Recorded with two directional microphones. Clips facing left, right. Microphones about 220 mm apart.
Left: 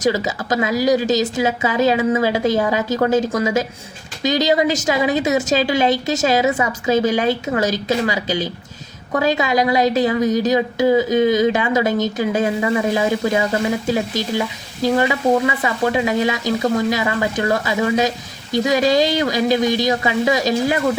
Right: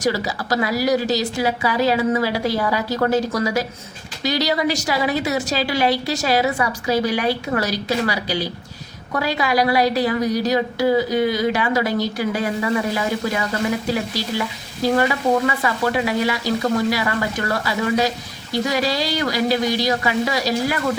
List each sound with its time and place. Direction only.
0.0 s a woman's voice: 20° left (ahead or behind)